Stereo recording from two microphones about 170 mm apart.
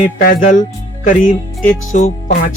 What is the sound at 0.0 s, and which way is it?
Speech, 55° left (ahead or behind).